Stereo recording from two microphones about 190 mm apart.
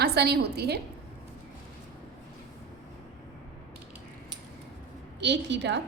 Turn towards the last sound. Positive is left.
turn(degrees=-65)  # may be behind; listen again after turning